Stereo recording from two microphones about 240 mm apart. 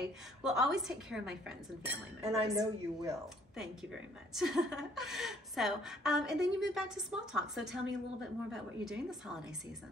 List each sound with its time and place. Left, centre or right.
0.0 s a woman's voice: centre
2.5 s speech: centre
3.5 s a woman's voice: centre